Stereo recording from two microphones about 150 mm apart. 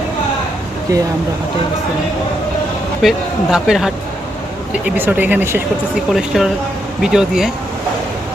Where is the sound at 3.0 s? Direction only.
5° right (ahead or behind).